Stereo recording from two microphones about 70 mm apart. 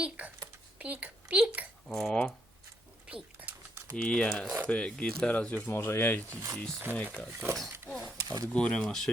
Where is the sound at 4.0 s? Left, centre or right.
Centre.